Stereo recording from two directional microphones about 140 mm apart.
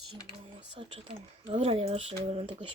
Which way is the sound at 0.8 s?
45° right (ahead or behind).